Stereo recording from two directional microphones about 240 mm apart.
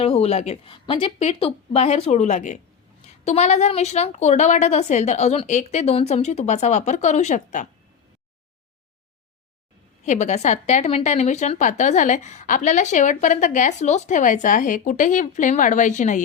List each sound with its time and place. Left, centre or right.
0.0 s a woman's voice: left
10.1 s a woman's voice: left